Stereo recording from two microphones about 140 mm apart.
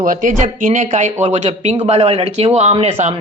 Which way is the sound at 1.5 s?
50° right (ahead or behind).